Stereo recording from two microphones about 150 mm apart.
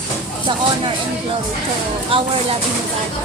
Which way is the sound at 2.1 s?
40° right (ahead or behind).